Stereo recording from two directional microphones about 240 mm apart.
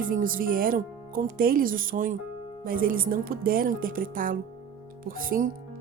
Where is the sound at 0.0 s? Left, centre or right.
Right.